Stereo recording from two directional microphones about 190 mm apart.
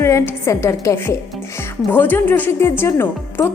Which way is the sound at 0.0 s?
15° left (ahead or behind).